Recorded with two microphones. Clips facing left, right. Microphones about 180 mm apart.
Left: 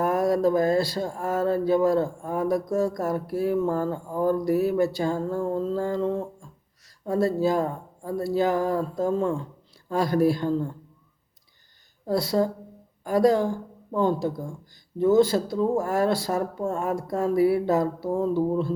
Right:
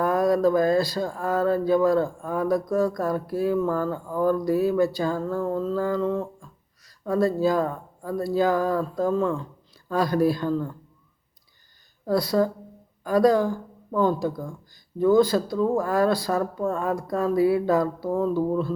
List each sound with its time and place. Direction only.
0.0 s speech: 25° left (ahead or behind)
12.0 s speech: 25° left (ahead or behind)